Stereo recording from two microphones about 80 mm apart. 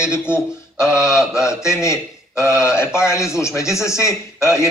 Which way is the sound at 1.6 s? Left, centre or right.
Left.